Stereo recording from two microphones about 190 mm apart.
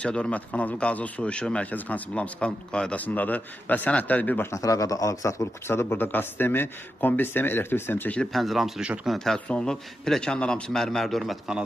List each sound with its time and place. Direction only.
0.0 s speech: 5° left (ahead or behind)